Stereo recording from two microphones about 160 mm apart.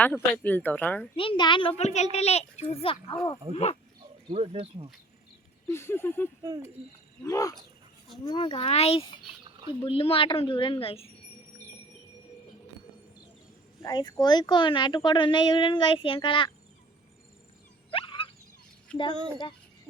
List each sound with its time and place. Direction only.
0.0 s speech: 10° left (ahead or behind)
1.1 s a woman's voice: 35° left (ahead or behind)
1.8 s a woman's voice: 45° left (ahead or behind)
4.3 s speech: 35° right (ahead or behind)
5.6 s speech: 15° left (ahead or behind)
6.4 s speech: 25° right (ahead or behind)
7.3 s a woman's voice: 20° left (ahead or behind)
8.2 s a woman's voice: 35° left (ahead or behind)
13.8 s a woman's voice: 25° left (ahead or behind)
17.9 s wild animals: 30° left (ahead or behind)
18.9 s speech: 5° left (ahead or behind)